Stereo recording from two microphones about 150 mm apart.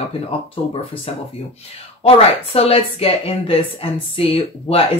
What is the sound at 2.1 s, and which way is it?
Speech, 40° left (ahead or behind).